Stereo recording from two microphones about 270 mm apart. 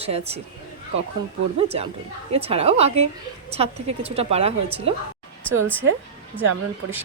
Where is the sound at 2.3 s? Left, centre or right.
Right.